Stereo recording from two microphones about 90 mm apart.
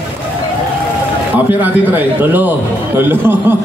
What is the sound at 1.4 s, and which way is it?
A man's voice, 20° right (ahead or behind).